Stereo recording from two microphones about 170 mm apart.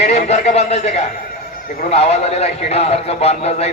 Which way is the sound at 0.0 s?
40° left (ahead or behind).